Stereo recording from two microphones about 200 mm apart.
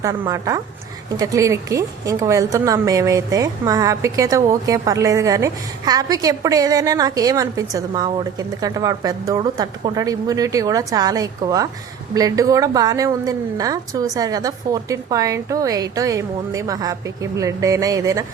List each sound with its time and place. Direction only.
0.0 s a woman's voice: 15° right (ahead or behind)